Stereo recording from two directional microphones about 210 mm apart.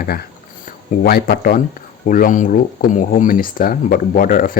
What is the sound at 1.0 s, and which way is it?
Speech, 45° left (ahead or behind).